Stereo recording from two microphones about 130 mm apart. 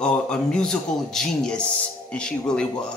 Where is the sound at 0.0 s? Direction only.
5° left (ahead or behind).